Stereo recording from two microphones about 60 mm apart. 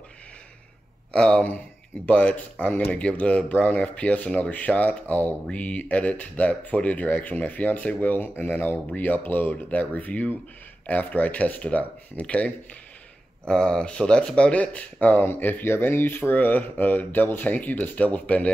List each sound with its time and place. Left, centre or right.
1.1 s speech: centre